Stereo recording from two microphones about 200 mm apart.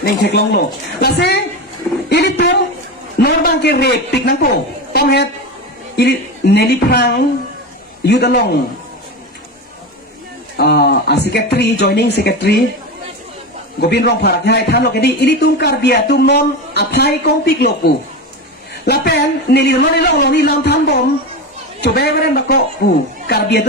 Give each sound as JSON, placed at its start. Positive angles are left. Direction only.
{"t": 0.0, "sound": "a man's voice", "side_deg": 55}
{"t": 10.6, "sound": "speech", "side_deg": 50}
{"t": 13.9, "sound": "a man's voice", "side_deg": 55}